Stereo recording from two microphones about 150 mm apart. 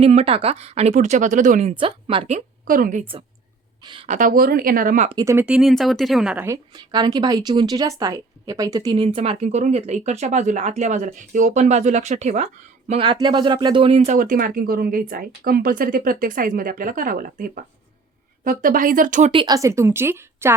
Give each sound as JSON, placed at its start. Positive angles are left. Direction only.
{"t": 0.0, "sound": "speech", "side_deg": -40}
{"t": 1.7, "sound": "speech", "side_deg": -35}
{"t": 2.6, "sound": "speech", "side_deg": -65}
{"t": 3.8, "sound": "speech", "side_deg": -35}
{"t": 4.1, "sound": "speech", "side_deg": -65}
{"t": 5.1, "sound": "a woman's voice", "side_deg": -20}
{"t": 5.5, "sound": "speech", "side_deg": -5}
{"t": 6.7, "sound": "a woman's voice", "side_deg": -30}
{"t": 9.0, "sound": "speech", "side_deg": -45}
{"t": 12.9, "sound": "speech", "side_deg": -30}
{"t": 14.2, "sound": "speech", "side_deg": -70}
{"t": 19.3, "sound": "speech", "side_deg": -35}
{"t": 19.5, "sound": "a woman's voice", "side_deg": -20}